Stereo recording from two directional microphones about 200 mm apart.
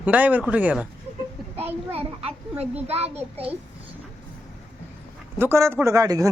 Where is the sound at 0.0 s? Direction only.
5° right (ahead or behind).